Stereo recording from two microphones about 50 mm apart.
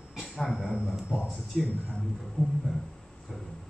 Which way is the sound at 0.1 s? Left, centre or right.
Centre.